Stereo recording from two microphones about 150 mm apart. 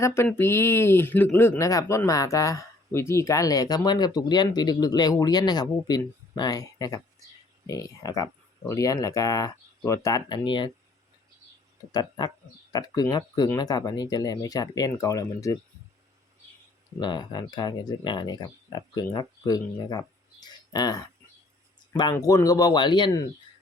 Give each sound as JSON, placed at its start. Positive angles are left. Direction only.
{"t": 0.0, "sound": "speech", "side_deg": 15}
{"t": 11.9, "sound": "speech", "side_deg": 30}
{"t": 17.0, "sound": "speech", "side_deg": 30}
{"t": 22.2, "sound": "speech", "side_deg": 25}